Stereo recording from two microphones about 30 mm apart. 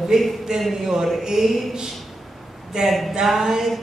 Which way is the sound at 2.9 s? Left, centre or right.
Centre.